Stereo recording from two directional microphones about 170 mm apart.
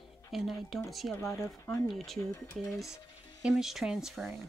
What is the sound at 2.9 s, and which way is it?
Music, 25° left (ahead or behind).